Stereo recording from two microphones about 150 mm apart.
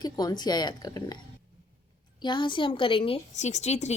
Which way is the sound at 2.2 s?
30° left (ahead or behind).